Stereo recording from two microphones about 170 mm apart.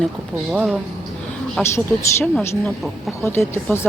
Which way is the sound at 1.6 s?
5° left (ahead or behind).